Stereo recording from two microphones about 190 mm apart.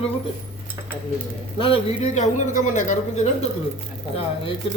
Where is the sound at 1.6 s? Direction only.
35° left (ahead or behind).